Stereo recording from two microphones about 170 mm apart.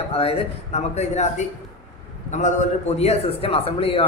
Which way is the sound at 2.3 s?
45° left (ahead or behind).